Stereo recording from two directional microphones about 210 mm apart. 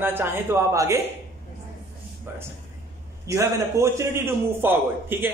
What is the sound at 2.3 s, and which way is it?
A man's voice, 10° right (ahead or behind).